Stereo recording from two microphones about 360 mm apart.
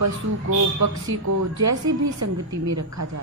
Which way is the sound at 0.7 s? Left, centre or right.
Right.